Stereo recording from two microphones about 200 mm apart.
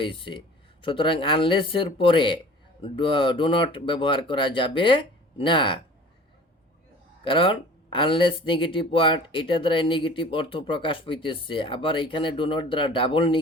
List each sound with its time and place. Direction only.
0.0 s speech: 25° left (ahead or behind)
7.3 s speech: 25° left (ahead or behind)